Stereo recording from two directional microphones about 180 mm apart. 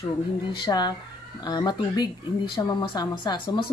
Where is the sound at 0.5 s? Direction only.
25° left (ahead or behind).